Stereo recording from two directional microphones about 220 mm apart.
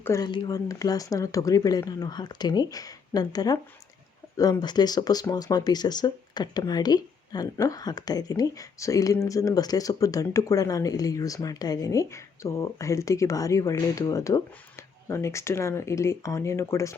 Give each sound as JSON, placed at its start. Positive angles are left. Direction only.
{"t": 0.0, "sound": "speech", "side_deg": 15}